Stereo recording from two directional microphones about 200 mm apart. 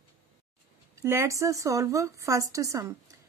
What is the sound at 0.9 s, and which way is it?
Speech, 10° right (ahead or behind).